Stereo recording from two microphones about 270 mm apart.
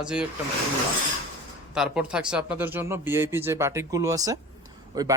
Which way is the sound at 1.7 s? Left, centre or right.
Centre.